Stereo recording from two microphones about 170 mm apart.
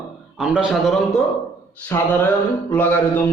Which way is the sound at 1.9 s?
15° left (ahead or behind).